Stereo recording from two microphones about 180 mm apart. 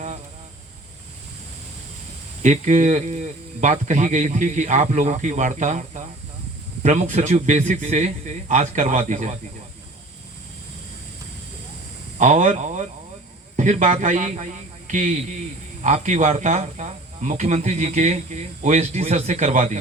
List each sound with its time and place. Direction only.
2.4 s speech: 45° right (ahead or behind)
12.2 s speech: 45° right (ahead or behind)